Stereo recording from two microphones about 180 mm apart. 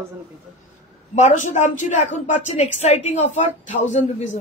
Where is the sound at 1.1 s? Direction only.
40° left (ahead or behind).